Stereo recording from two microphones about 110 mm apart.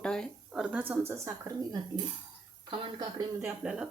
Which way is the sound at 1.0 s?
25° right (ahead or behind).